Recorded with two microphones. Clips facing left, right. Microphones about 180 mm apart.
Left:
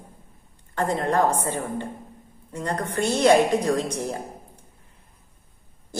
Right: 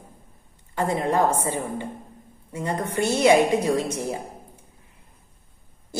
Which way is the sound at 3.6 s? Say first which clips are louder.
Even; 20° right (ahead or behind).